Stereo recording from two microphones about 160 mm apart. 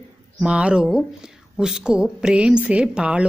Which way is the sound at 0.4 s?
5° right (ahead or behind).